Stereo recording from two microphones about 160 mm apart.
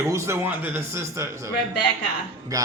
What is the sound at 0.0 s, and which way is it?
A man's voice, 15° right (ahead or behind).